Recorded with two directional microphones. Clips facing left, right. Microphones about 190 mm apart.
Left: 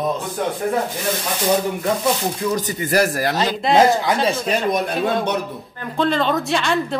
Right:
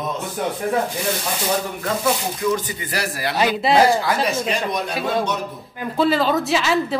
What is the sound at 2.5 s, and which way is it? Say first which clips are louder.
Speech: left 7 dB; 45° left (ahead or behind).